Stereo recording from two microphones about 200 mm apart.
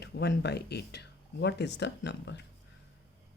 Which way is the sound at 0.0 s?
55° left (ahead or behind).